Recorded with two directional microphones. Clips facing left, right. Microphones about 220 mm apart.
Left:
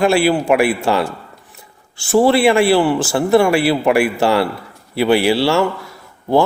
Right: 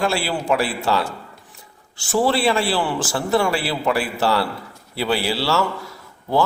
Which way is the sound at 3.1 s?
60° left (ahead or behind).